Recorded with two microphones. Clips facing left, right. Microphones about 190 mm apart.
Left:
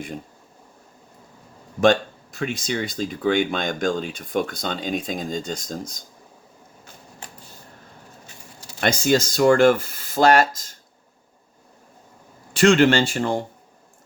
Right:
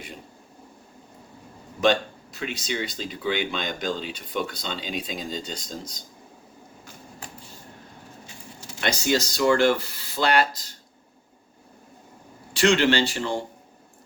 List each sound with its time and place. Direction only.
1.8 s speech: 50° left (ahead or behind)
8.8 s speech: 50° left (ahead or behind)
12.5 s speech: 50° left (ahead or behind)